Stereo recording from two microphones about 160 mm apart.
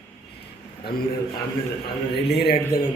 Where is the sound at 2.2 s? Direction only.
90° left.